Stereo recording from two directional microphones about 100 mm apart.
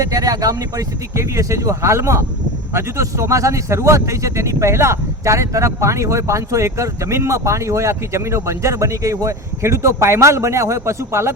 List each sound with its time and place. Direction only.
0.0 s speech: 35° right (ahead or behind)